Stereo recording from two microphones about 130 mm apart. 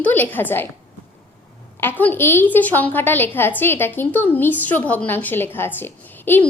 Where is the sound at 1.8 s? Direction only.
15° left (ahead or behind).